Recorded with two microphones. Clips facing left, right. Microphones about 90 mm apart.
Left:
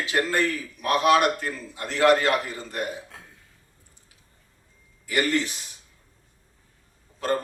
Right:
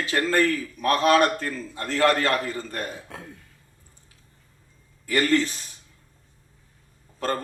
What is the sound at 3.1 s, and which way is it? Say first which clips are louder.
Cough: right 7 dB; 65° right (ahead or behind).